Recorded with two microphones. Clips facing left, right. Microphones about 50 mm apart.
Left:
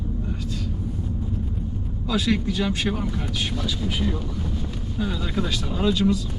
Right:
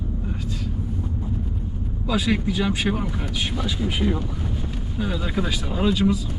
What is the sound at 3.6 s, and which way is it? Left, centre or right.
Speech, right.